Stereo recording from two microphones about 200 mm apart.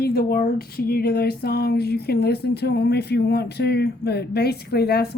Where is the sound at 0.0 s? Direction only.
50° left (ahead or behind).